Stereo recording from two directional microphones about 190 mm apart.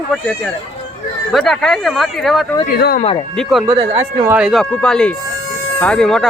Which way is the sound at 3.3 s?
Centre (ahead or behind).